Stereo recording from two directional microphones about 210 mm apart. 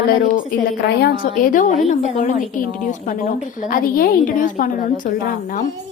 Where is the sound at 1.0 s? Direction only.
45° left (ahead or behind).